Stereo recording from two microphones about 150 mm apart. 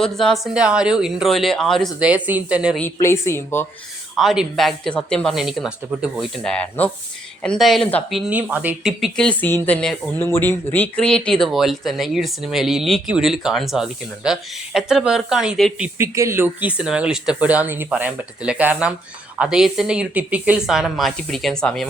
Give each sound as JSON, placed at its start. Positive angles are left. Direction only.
{"t": 0.0, "sound": "speech", "side_deg": 5}
{"t": 2.0, "sound": "speech", "side_deg": -10}
{"t": 3.0, "sound": "speech", "side_deg": 15}
{"t": 4.2, "sound": "speech", "side_deg": 0}
{"t": 8.1, "sound": "speech", "side_deg": -10}
{"t": 16.0, "sound": "speech", "side_deg": -20}